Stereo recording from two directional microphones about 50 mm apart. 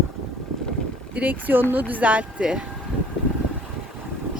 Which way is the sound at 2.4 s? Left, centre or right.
Centre.